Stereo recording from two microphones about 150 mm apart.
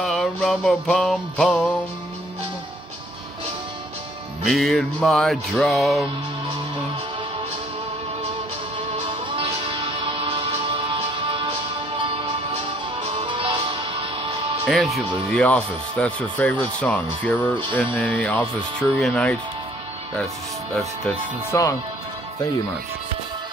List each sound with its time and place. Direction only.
0.0 s music: centre (ahead or behind)
4.5 s music: centre (ahead or behind)
8.9 s music: 35° right (ahead or behind)
13.0 s music: 35° right (ahead or behind)
15.0 s speech: 5° left (ahead or behind)
20.7 s music: 5° left (ahead or behind)
21.5 s speech: 20° left (ahead or behind)